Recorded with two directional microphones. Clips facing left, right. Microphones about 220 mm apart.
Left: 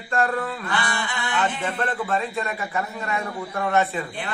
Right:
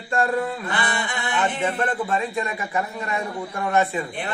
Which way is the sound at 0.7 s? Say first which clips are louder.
Right 1 dB; 20° right (ahead or behind).